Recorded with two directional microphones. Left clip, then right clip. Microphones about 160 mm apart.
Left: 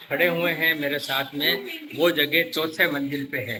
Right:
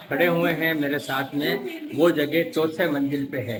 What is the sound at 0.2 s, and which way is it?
A man's voice, 65° right (ahead or behind).